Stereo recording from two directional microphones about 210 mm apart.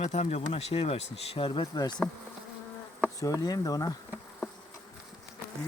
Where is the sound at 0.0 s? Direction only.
30° left (ahead or behind).